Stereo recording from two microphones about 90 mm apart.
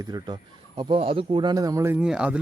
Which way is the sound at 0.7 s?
90° right.